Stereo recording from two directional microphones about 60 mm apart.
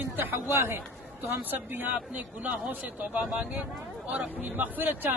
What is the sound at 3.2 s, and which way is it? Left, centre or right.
Speech, centre.